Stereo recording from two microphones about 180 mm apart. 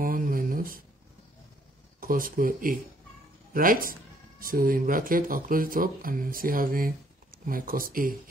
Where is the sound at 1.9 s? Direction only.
50° right (ahead or behind).